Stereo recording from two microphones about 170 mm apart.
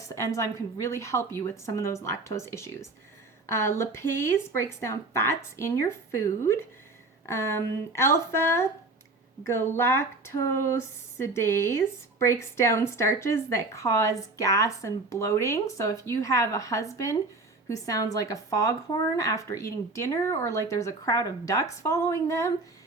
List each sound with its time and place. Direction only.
0.1 s a woman's voice: 20° left (ahead or behind)